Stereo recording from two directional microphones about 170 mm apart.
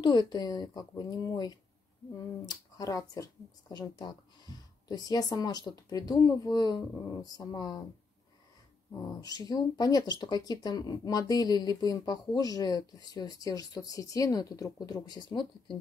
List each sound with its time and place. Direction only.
0.0 s speech: 25° left (ahead or behind)
8.9 s speech: 20° left (ahead or behind)